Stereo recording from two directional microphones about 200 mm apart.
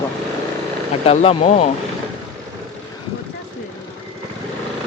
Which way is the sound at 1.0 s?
30° left (ahead or behind).